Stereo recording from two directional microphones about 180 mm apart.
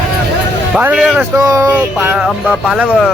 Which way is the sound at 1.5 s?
20° right (ahead or behind).